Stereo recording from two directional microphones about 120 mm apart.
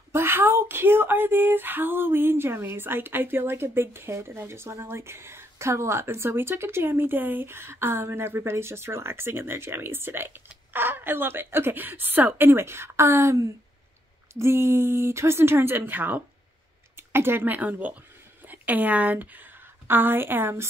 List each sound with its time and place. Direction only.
0.1 s a woman's voice: 20° right (ahead or behind)